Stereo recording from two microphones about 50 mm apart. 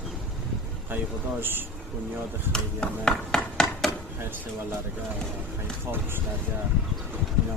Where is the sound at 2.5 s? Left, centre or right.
Centre.